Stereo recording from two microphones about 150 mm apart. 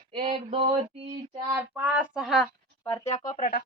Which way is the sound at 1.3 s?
35° right (ahead or behind).